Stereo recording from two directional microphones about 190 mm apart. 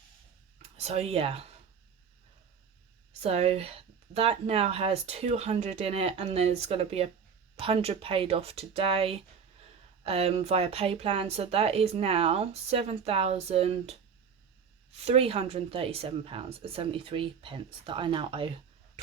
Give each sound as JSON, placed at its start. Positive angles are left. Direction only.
{"t": 0.8, "sound": "speech", "side_deg": -35}
{"t": 3.2, "sound": "a woman's voice", "side_deg": -35}
{"t": 14.9, "sound": "a woman's voice", "side_deg": -30}